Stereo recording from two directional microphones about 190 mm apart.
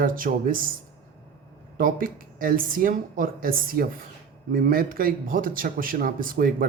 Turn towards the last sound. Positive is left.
turn(degrees=-50)  # may be behind; listen again after turning